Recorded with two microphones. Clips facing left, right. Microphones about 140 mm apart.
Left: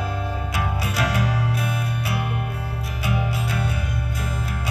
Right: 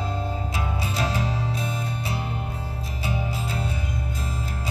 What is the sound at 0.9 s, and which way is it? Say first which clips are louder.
Music: left 3 dB; 70° left (ahead or behind).